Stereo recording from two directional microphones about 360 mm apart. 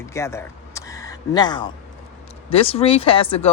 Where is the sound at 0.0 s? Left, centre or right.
Centre.